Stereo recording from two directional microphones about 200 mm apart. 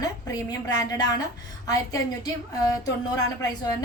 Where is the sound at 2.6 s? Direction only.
20° left (ahead or behind).